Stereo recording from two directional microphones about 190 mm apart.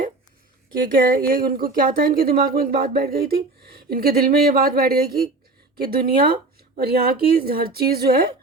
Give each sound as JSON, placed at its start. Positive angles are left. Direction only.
{"t": 1.1, "sound": "speech", "side_deg": -50}